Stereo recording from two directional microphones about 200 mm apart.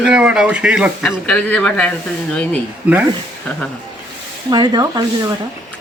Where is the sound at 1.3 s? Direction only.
5° left (ahead or behind).